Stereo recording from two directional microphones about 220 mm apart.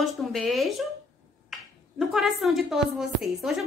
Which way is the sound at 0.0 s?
Centre (ahead or behind).